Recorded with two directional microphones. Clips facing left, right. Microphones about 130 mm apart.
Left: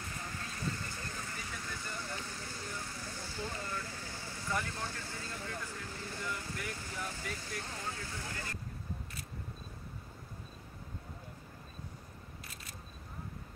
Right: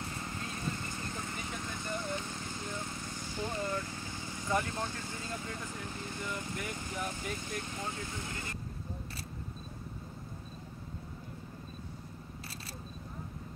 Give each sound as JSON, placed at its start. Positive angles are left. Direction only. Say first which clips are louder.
{"t": 0.1, "sound": "vehicle", "louder": "right 3 dB", "side_deg": -20}
{"t": 5.8, "sound": "speech", "louder": "right 2 dB", "side_deg": -20}